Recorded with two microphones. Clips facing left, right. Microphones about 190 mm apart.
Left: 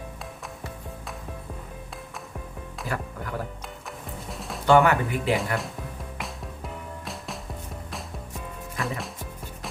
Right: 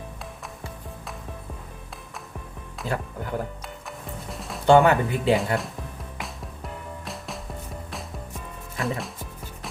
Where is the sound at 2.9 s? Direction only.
25° right (ahead or behind).